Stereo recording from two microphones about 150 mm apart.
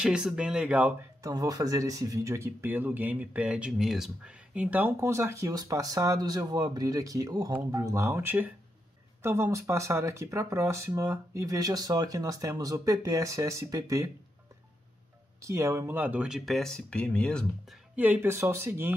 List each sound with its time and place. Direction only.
0.0 s speech: 5° right (ahead or behind)
1.2 s speech: 25° right (ahead or behind)
15.4 s speech: 20° right (ahead or behind); by 17.7 s 5° left (ahead or behind)
17.9 s speech: 10° right (ahead or behind)